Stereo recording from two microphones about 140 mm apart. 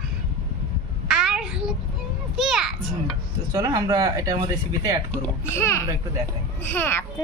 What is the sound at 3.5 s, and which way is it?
Speech, 25° right (ahead or behind).